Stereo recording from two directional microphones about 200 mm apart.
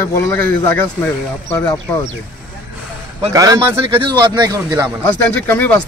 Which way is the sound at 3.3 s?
15° right (ahead or behind).